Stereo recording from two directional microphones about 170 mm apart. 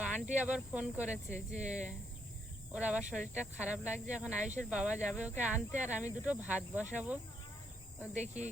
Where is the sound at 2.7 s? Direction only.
5° right (ahead or behind).